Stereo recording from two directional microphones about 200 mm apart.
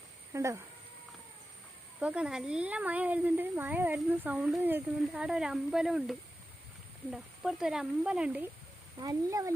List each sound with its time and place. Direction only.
0.3 s speech: 15° right (ahead or behind)
2.0 s speech: 5° right (ahead or behind)
9.0 s speech: 20° right (ahead or behind)